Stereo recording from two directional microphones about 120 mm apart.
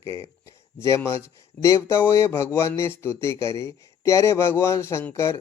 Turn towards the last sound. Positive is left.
turn(degrees=25)  # may be behind; listen again after turning